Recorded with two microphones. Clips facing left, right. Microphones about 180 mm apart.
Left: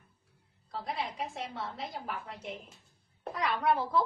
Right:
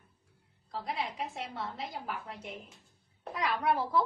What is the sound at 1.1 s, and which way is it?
A woman's voice, centre (ahead or behind).